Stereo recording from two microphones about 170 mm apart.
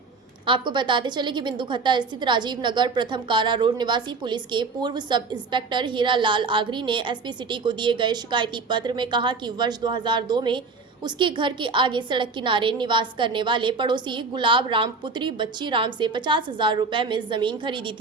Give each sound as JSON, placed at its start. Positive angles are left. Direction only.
{"t": 0.4, "sound": "a woman's voice", "side_deg": -30}